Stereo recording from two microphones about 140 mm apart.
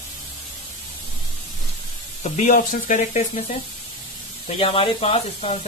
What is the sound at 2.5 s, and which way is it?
Speech, 80° left.